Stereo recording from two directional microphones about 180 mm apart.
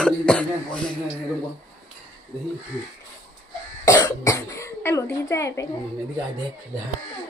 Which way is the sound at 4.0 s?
20° left (ahead or behind).